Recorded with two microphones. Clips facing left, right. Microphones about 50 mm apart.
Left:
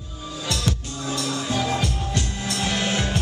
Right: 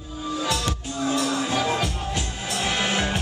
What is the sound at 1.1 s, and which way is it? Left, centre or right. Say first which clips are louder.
Music: right 1 dB; centre.